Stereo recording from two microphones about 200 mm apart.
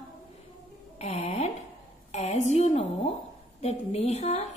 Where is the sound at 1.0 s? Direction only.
35° left (ahead or behind).